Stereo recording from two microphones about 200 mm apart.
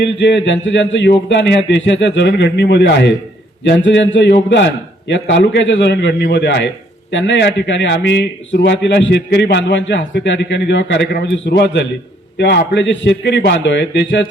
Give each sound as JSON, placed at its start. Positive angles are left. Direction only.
{"t": 0.0, "sound": "a man's voice", "side_deg": 65}